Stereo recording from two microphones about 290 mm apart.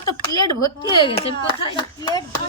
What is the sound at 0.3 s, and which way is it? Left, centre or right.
Speech, left.